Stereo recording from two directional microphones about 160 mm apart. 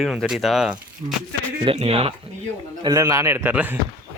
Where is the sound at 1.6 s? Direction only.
35° right (ahead or behind).